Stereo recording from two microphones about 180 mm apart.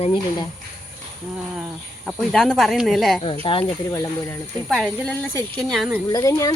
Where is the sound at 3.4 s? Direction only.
30° left (ahead or behind).